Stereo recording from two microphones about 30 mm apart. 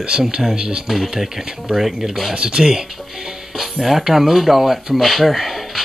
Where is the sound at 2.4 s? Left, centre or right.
Right.